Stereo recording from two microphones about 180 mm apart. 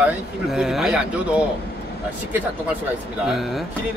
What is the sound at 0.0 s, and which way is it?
Speech, 5° right (ahead or behind).